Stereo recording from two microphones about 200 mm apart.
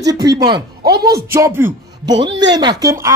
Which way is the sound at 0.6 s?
55° right (ahead or behind).